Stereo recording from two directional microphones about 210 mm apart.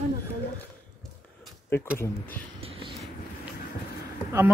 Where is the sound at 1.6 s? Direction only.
10° left (ahead or behind).